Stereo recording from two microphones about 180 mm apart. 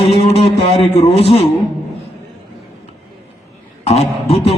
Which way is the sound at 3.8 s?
35° left (ahead or behind).